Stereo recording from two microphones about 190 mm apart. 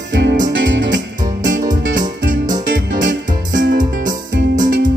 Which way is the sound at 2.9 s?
45° right (ahead or behind).